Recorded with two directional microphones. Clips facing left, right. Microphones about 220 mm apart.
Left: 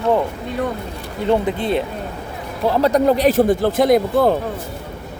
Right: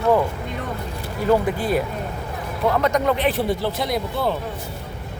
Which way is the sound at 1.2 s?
25° left (ahead or behind).